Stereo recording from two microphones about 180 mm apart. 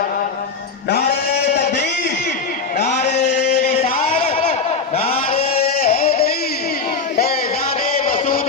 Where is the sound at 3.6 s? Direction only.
35° left (ahead or behind).